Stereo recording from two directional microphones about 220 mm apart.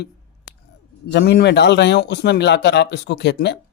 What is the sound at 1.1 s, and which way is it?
A man's voice, 50° left (ahead or behind).